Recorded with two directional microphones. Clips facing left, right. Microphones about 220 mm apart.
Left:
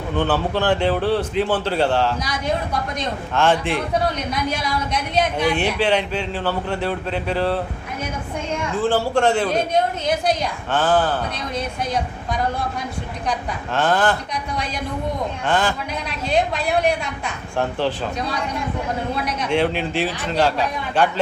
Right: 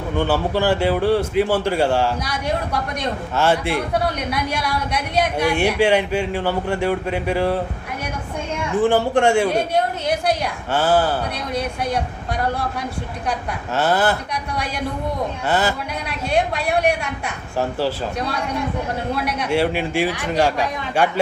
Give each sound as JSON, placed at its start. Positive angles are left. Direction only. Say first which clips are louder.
{"t": 0.2, "sound": "a man's voice", "louder": "right 1 dB", "side_deg": -10}
{"t": 3.3, "sound": "a man's voice", "louder": "left 1 dB", "side_deg": -10}
{"t": 4.3, "sound": "a woman's voice", "louder": "even", "side_deg": -70}
{"t": 5.4, "sound": "a man's voice", "louder": "right 2 dB", "side_deg": -10}
{"t": 8.7, "sound": "a man's voice", "louder": "right 3 dB", "side_deg": -15}
{"t": 10.7, "sound": "a man's voice", "louder": "right 1 dB", "side_deg": -10}
{"t": 13.7, "sound": "a man's voice", "louder": "even", "side_deg": -10}
{"t": 15.4, "sound": "a man's voice", "louder": "even", "side_deg": -10}
{"t": 17.6, "sound": "a man's voice", "louder": "even", "side_deg": -10}
{"t": 19.5, "sound": "a man's voice", "louder": "even", "side_deg": -10}